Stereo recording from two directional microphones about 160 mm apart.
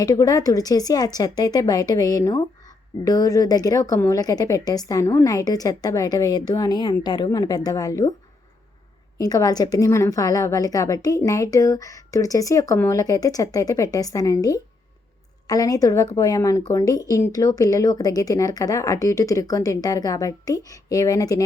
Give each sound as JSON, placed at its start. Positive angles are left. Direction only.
{"t": 0.0, "sound": "a woman's voice", "side_deg": 20}
{"t": 9.1, "sound": "a woman's voice", "side_deg": 25}